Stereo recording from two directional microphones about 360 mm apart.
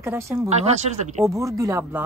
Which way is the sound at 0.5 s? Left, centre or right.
Centre.